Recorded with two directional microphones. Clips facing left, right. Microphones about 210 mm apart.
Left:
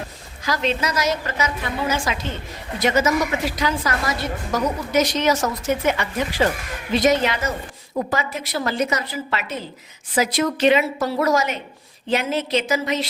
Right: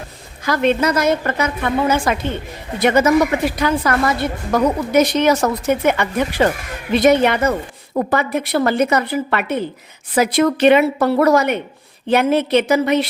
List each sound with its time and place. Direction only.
0.4 s a woman's voice: 55° right (ahead or behind)